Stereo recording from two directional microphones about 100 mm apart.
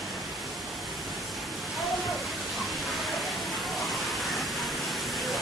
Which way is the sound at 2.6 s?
Centre (ahead or behind).